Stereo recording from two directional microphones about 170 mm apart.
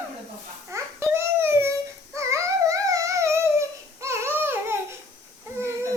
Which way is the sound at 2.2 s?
15° right (ahead or behind).